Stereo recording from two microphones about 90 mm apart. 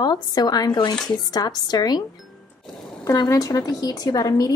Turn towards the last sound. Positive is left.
turn(degrees=45)  # may be behind; listen again after turning